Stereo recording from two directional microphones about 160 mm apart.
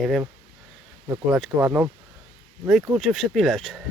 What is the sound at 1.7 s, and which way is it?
Speech, 15° right (ahead or behind).